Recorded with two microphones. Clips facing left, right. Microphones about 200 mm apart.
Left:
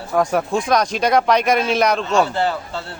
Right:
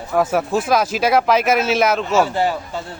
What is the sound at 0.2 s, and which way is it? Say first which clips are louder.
Speech: right 1 dB; 5° right (ahead or behind).